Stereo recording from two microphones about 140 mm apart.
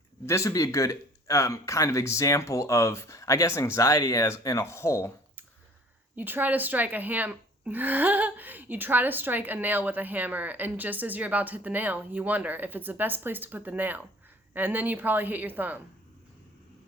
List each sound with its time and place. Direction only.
0.3 s speech: 20° left (ahead or behind)
6.1 s speech: 15° right (ahead or behind)